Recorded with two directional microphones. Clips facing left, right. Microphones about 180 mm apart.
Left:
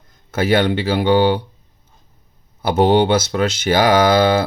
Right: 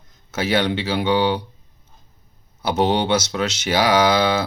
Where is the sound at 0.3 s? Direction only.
55° left (ahead or behind).